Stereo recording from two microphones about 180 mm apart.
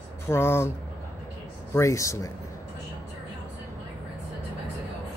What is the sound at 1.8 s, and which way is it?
Speech, 15° left (ahead or behind).